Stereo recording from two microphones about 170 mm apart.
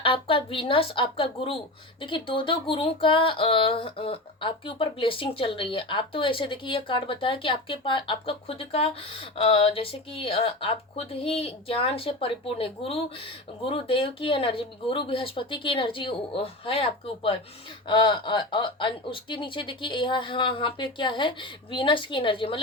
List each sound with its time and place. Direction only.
0.0 s speech: 30° left (ahead or behind)